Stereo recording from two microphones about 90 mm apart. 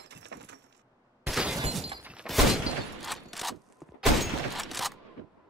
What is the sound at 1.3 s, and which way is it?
Shatter, 5° right (ahead or behind).